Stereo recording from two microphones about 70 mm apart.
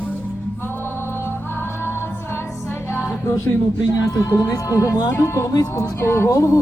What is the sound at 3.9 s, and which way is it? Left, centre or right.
Speech, left.